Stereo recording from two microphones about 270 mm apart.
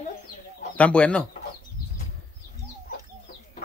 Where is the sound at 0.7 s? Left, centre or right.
Centre.